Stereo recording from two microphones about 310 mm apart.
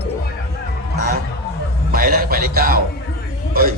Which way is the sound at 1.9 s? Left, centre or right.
Right.